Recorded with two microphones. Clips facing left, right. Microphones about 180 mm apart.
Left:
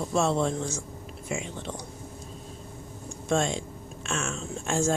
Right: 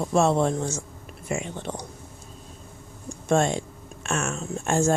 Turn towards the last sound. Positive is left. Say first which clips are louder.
# right 4 dB
turn(degrees=-55)  # may be behind; listen again after turning